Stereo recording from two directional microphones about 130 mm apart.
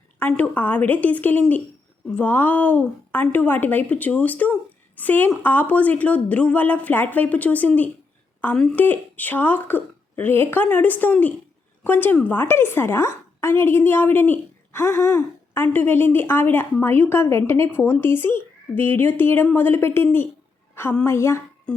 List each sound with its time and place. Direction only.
0.2 s a woman's voice: 10° left (ahead or behind)